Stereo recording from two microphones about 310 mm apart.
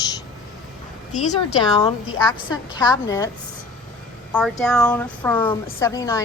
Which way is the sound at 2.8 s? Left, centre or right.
Centre.